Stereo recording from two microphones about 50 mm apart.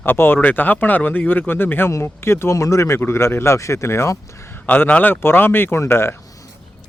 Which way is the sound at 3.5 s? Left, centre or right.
Left.